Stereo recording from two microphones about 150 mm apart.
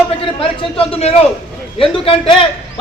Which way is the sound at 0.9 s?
45° left (ahead or behind).